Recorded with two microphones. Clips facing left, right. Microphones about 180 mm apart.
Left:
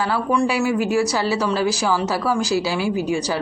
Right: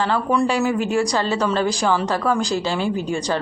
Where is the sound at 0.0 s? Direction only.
5° left (ahead or behind).